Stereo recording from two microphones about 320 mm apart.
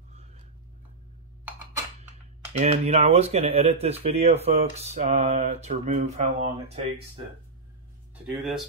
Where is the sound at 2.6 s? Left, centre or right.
Right.